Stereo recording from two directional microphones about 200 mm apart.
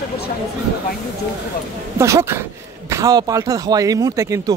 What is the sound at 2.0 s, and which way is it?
Speech, 15° right (ahead or behind).